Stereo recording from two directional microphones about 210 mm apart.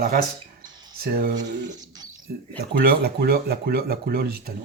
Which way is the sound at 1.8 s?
20° right (ahead or behind).